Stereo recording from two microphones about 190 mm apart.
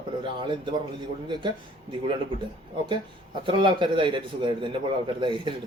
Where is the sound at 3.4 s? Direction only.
25° right (ahead or behind).